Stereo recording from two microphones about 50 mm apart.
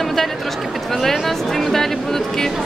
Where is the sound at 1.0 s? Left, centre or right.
Centre.